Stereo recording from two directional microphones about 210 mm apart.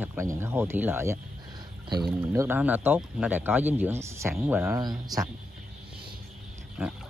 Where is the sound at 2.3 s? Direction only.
10° right (ahead or behind).